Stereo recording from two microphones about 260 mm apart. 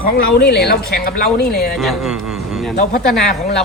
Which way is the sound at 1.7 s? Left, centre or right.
Centre.